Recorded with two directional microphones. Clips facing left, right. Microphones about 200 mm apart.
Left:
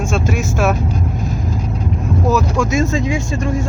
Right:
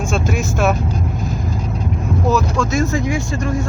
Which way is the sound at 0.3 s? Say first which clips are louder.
Right 1 dB; 5° left (ahead or behind).